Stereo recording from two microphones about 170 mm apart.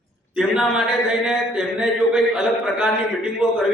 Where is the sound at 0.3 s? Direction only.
5° right (ahead or behind).